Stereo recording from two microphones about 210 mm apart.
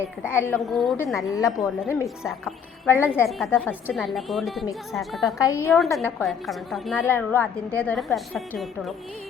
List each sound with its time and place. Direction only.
0.2 s a woman's voice: 10° left (ahead or behind)
1.3 s a woman's voice: 15° left (ahead or behind)
1.5 s a woman's voice: centre (ahead or behind)
2.4 s a woman's voice: 10° left (ahead or behind)
3.2 s a woman's voice: centre (ahead or behind)
5.2 s a woman's voice: 15° left (ahead or behind)